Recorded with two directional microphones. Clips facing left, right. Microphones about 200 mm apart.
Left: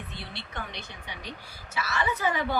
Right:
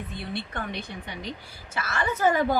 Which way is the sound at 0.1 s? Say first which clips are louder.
Right 7 dB; 55° right (ahead or behind).